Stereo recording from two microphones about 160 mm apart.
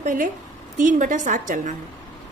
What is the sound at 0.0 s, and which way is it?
A woman's voice, 55° right (ahead or behind).